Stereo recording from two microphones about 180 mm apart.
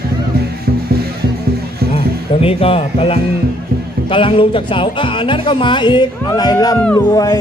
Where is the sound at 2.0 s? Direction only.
30° left (ahead or behind).